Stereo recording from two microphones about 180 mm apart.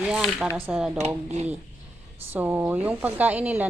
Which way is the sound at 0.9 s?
40° right (ahead or behind).